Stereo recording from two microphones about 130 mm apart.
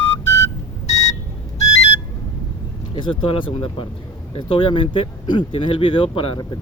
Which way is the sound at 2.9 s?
40° left (ahead or behind).